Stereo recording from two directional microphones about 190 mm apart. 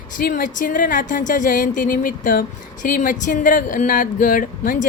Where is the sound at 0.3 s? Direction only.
45° left (ahead or behind).